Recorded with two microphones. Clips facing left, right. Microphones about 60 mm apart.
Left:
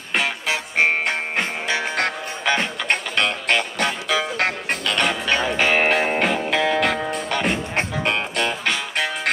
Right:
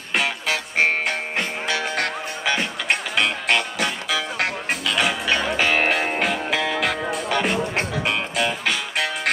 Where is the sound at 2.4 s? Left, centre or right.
Centre.